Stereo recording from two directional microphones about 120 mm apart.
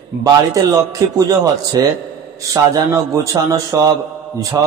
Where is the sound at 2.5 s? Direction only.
25° right (ahead or behind).